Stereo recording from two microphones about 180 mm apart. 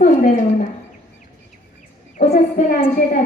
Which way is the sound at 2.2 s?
55° left (ahead or behind).